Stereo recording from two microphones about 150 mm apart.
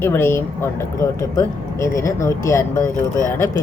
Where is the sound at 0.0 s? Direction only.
15° left (ahead or behind).